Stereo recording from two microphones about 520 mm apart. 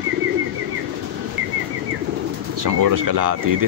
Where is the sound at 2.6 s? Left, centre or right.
Right.